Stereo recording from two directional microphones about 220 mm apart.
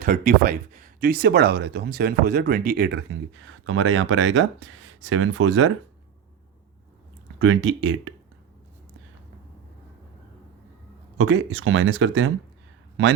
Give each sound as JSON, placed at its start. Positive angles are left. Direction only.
{"t": 0.0, "sound": "speech", "side_deg": -40}
{"t": 7.3, "sound": "speech", "side_deg": -65}
{"t": 11.2, "sound": "speech", "side_deg": -60}